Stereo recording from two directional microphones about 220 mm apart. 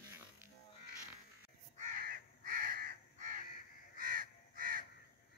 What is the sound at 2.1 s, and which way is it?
Crow, 40° right (ahead or behind).